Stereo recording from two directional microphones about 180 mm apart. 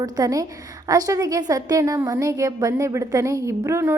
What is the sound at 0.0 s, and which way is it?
A woman's voice, 20° right (ahead or behind).